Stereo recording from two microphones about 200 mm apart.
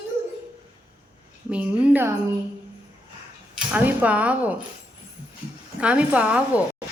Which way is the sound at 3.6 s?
10° right (ahead or behind).